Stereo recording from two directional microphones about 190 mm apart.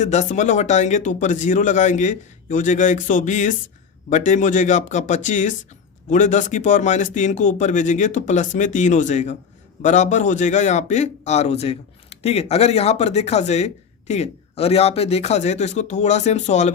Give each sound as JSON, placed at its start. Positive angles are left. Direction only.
{"t": 0.0, "sound": "a man's voice", "side_deg": 40}